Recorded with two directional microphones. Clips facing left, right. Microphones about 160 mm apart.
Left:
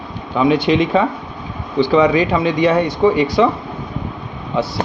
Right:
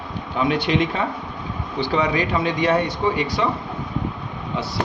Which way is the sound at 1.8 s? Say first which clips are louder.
Left 8 dB; 90° left.